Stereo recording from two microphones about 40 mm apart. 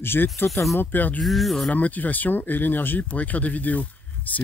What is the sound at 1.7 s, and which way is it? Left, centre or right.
Speech, left.